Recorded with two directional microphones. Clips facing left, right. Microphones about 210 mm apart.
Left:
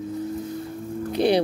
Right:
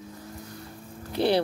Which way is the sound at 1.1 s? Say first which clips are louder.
Left 3 dB; 15° left (ahead or behind).